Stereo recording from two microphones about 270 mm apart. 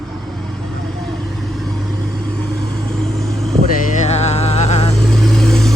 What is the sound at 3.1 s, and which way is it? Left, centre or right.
Vehicle, centre.